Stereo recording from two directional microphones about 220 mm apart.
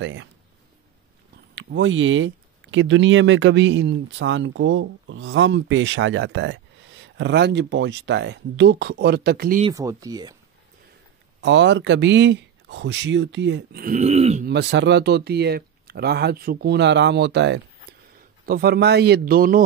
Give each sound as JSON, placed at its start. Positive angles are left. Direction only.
{"t": 0.0, "sound": "speech", "side_deg": -60}
{"t": 1.5, "sound": "speech", "side_deg": -55}
{"t": 9.7, "sound": "speech", "side_deg": -15}
{"t": 11.4, "sound": "speech", "side_deg": -55}
{"t": 14.5, "sound": "speech", "side_deg": -50}